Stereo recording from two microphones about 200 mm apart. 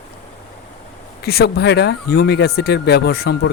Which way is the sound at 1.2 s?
55° left (ahead or behind).